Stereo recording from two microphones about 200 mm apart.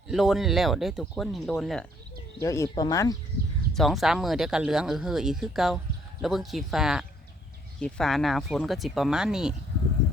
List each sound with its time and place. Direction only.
0.1 s speech: centre (ahead or behind)
2.4 s speech: 15° left (ahead or behind)
3.8 s speech: centre (ahead or behind)